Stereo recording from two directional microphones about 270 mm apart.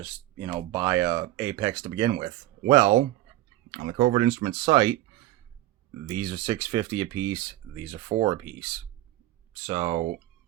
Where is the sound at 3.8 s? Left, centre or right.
Right; by 4.9 s centre.